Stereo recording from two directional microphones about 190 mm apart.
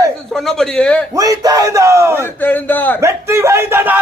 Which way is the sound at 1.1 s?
20° right (ahead or behind).